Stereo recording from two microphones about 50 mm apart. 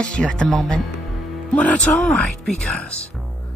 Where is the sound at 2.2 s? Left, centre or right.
Centre.